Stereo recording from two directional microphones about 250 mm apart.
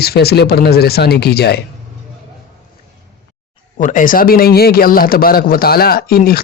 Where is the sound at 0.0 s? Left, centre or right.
Left.